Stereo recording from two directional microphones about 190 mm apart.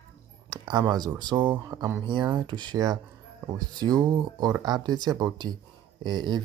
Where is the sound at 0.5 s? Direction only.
20° right (ahead or behind).